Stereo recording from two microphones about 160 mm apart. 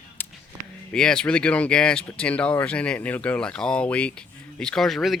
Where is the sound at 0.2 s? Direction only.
10° left (ahead or behind).